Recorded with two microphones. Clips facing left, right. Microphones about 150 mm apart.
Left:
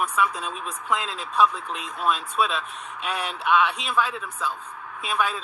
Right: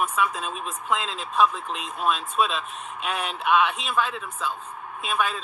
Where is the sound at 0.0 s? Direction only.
20° right (ahead or behind).